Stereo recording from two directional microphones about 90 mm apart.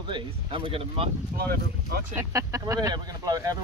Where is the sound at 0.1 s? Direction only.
80° right.